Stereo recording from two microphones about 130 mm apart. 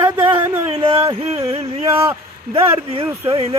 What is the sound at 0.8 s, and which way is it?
Speech, 45° right (ahead or behind).